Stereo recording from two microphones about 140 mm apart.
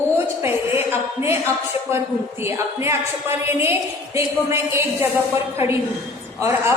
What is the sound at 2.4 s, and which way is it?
A woman's voice, 20° right (ahead or behind).